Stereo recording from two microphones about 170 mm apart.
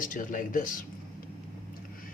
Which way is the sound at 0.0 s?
50° left (ahead or behind).